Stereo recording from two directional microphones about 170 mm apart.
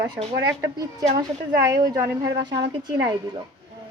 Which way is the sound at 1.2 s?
20° right (ahead or behind).